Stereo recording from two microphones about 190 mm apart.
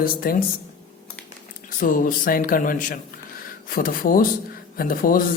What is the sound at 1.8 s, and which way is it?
Speech, 45° left (ahead or behind).